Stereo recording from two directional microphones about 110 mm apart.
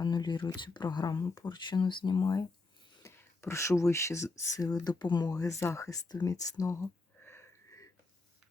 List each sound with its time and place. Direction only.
0.0 s speech: 40° left (ahead or behind)
7.2 s sniff: 20° left (ahead or behind)